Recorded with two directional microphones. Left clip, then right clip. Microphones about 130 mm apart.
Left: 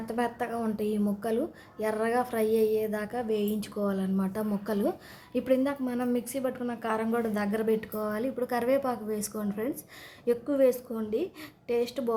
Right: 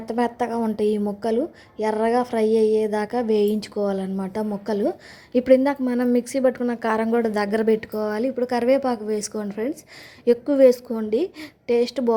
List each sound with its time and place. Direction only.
0.0 s a woman's voice: 35° right (ahead or behind)